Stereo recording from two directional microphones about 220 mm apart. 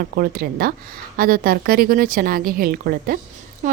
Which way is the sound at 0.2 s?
40° right (ahead or behind).